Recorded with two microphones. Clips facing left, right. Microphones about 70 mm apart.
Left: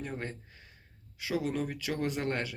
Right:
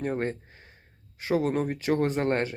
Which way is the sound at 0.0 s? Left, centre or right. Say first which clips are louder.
Right 10 dB; right.